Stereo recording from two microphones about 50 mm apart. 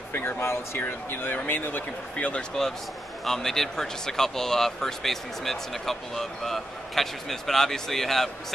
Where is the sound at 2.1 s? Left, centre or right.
Left.